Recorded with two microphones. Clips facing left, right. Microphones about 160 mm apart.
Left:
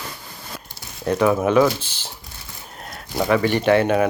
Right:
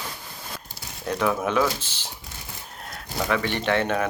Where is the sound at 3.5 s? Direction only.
5° left (ahead or behind).